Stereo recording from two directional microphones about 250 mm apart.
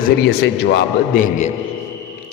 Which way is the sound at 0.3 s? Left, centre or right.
Left.